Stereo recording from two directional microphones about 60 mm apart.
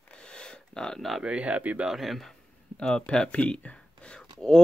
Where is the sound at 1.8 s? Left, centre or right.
Centre.